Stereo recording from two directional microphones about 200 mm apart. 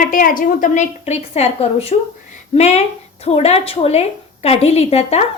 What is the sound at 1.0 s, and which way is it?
A woman's voice, 30° left (ahead or behind).